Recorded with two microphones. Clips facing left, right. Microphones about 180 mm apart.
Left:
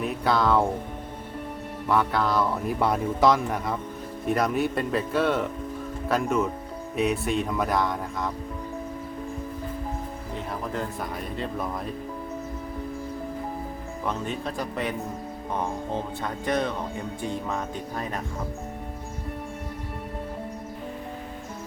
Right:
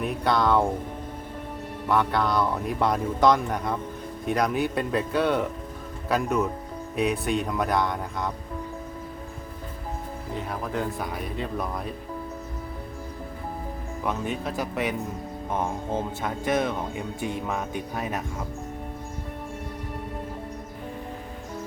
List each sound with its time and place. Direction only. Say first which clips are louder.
0.0 s speech: even; 5° left (ahead or behind)
1.9 s speech: even; 5° left (ahead or behind)
10.5 s speech: right 2 dB; centre (ahead or behind)
14.0 s speech: right 1 dB; 5° right (ahead or behind)
16.2 s speech: right 1 dB; 5° right (ahead or behind)